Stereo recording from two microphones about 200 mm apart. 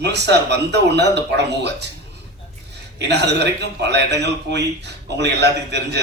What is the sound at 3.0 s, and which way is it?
A man's voice, 60° right (ahead or behind).